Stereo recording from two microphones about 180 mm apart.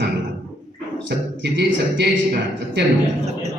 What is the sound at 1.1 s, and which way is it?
A man's voice, 75° right (ahead or behind).